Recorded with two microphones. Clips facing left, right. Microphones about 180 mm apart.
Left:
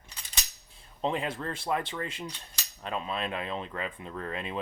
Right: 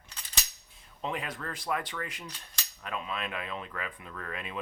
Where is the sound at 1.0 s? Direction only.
30° left (ahead or behind).